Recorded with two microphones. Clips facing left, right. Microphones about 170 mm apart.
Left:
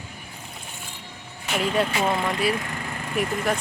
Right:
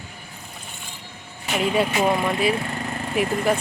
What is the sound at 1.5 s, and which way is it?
Speech, 5° right (ahead or behind).